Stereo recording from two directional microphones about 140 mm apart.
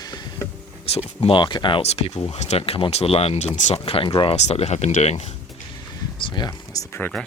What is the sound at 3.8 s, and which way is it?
Speech, 40° left (ahead or behind).